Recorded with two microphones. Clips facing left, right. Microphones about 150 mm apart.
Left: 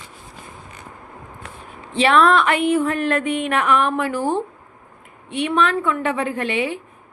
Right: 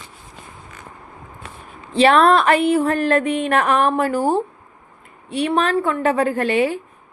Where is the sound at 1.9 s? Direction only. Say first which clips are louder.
Right 2 dB; 40° right (ahead or behind).